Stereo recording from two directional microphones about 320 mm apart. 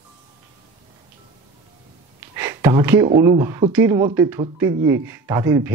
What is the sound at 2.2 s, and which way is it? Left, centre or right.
Speech, centre.